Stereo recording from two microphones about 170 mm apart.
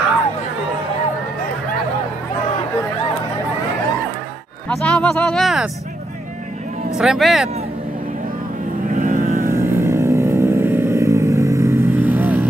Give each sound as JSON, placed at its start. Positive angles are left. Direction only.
{"t": 4.6, "sound": "speech", "side_deg": 5}
{"t": 7.0, "sound": "speech", "side_deg": 0}
{"t": 8.9, "sound": "vehicle", "side_deg": -50}
{"t": 9.5, "sound": "vehicle", "side_deg": -15}